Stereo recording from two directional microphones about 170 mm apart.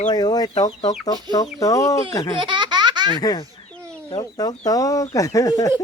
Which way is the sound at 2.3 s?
25° right (ahead or behind).